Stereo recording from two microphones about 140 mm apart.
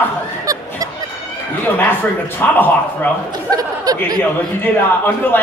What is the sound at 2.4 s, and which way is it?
Speech, 15° left (ahead or behind).